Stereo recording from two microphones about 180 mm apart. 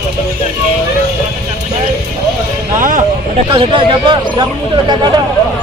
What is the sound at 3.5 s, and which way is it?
Speech, 30° right (ahead or behind).